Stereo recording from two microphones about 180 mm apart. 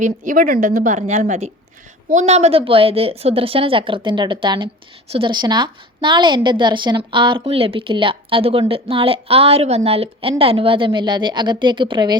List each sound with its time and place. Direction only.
0.0 s a woman's voice: 50° right (ahead or behind); by 12.1 s 25° right (ahead or behind)